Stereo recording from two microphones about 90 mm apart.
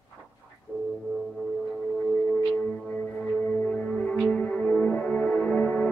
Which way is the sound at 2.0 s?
10° left (ahead or behind).